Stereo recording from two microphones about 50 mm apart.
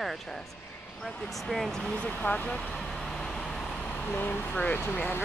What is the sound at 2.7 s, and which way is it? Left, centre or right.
Vehicle, centre.